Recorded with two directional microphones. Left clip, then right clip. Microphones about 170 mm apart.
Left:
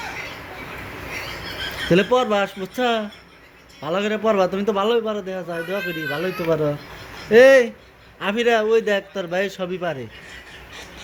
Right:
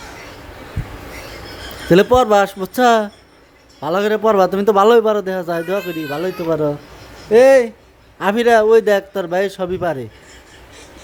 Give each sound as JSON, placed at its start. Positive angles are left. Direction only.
{"t": 1.9, "sound": "a man's voice", "side_deg": -35}
{"t": 5.8, "sound": "speech", "side_deg": -25}
{"t": 8.2, "sound": "a man's voice", "side_deg": -40}